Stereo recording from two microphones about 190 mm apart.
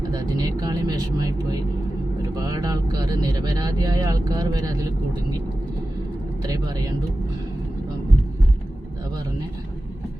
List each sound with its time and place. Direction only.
0.1 s vehicle: 20° right (ahead or behind)
2.3 s speech: 20° right (ahead or behind)
6.4 s speech: 20° right (ahead or behind)